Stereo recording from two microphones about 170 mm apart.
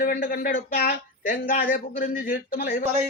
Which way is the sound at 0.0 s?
60° left (ahead or behind).